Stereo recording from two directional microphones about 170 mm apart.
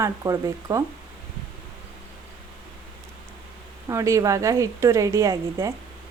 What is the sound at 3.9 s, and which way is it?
A woman's voice, 20° right (ahead or behind).